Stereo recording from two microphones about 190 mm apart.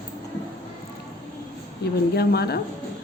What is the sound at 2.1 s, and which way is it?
Speech, 55° left (ahead or behind).